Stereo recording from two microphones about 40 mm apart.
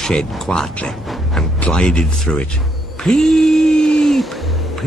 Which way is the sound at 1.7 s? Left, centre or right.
Left.